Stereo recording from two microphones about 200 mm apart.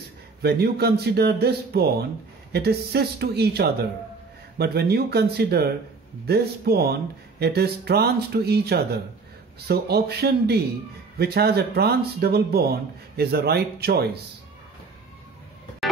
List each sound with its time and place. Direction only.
0.4 s speech: 55° right (ahead or behind)